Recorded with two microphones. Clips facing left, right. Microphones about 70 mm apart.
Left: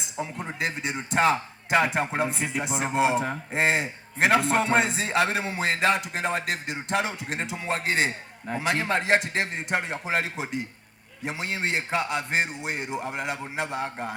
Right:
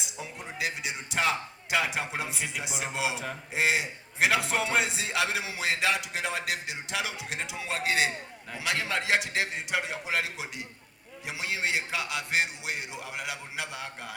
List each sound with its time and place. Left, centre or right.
0.2 s a man's voice: left